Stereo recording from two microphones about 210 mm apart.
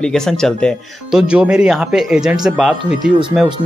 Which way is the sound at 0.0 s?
5° left (ahead or behind).